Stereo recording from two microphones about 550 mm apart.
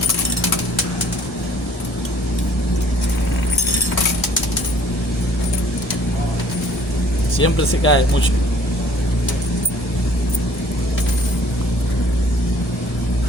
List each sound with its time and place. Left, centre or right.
7.4 s speech: left